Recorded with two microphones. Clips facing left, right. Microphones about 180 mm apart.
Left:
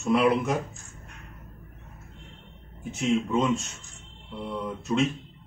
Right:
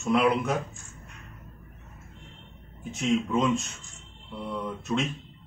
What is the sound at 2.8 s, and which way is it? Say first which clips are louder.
Speech: left 1 dB; centre (ahead or behind).